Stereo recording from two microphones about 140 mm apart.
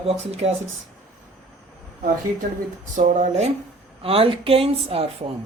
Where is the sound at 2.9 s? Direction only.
60° right (ahead or behind).